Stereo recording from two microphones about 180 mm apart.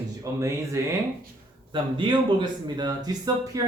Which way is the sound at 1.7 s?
25° right (ahead or behind).